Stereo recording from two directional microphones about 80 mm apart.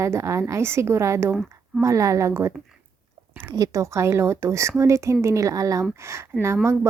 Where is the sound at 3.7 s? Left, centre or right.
Right.